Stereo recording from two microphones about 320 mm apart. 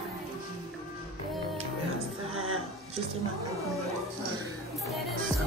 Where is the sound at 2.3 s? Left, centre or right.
Right.